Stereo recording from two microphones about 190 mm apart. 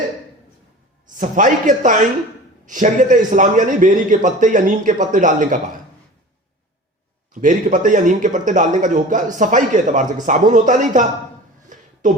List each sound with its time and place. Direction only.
1.1 s a man's voice: 45° right (ahead or behind)
7.4 s a man's voice: 45° right (ahead or behind)
11.7 s a sound: 40° right (ahead or behind)